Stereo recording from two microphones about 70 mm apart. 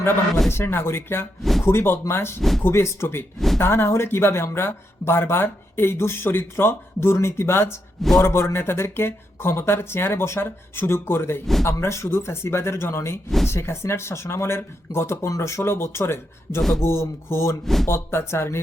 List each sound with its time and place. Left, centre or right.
0.5 s speech: left
1.4 s a sound: centre
1.6 s speech: left
2.4 s speech: centre
2.6 s speech: left
3.3 s speech: centre
3.6 s speech: left
11.6 s speech: left
16.6 s speech: centre
16.8 s speech: left